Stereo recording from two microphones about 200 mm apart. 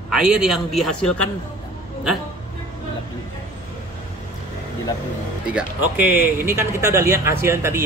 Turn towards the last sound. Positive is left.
turn(degrees=-15)  # may be behind; listen again after turning